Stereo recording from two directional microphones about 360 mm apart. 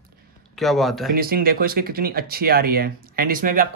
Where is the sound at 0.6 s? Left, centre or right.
Centre.